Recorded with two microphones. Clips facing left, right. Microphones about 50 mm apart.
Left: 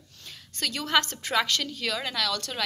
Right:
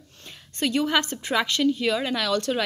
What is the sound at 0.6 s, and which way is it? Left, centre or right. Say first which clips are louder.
A woman's voice: right 3 dB; right.